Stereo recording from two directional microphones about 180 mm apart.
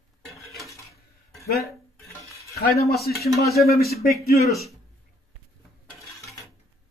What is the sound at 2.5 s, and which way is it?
Speech, 60° left (ahead or behind).